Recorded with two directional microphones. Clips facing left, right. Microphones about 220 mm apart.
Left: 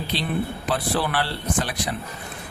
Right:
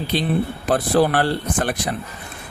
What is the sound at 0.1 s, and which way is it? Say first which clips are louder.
Speech: right 5 dB; 50° right (ahead or behind).